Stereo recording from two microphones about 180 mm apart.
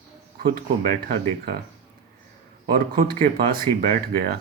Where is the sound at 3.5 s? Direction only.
50° right (ahead or behind).